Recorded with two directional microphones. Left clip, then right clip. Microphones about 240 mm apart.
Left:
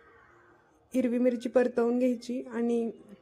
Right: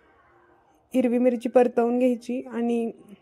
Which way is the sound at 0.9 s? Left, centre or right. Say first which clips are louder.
Right 5 dB; right.